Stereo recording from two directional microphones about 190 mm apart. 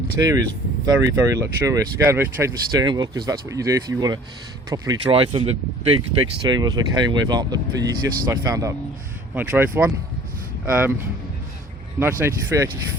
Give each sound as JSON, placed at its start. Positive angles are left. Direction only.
{"t": 0.2, "sound": "speech", "side_deg": -20}